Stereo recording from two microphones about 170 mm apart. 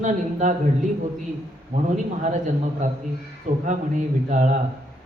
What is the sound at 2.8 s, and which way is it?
A man's voice, 45° right (ahead or behind).